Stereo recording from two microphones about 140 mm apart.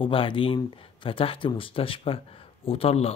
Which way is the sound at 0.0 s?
40° left (ahead or behind).